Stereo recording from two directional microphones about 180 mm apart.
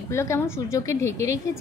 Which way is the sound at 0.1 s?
15° left (ahead or behind).